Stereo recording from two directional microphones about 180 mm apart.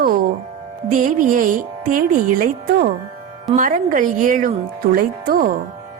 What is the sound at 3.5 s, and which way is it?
Speech, 45° right (ahead or behind).